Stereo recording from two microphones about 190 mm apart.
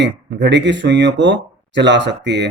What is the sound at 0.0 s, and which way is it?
Speech, 65° right (ahead or behind).